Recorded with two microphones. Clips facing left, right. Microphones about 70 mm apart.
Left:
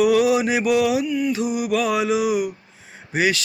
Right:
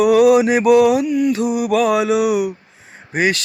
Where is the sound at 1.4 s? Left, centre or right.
Right.